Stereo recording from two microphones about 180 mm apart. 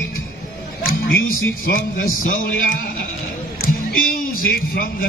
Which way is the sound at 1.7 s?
55° left (ahead or behind).